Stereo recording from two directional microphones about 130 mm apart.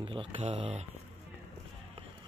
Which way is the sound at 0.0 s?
45° right (ahead or behind).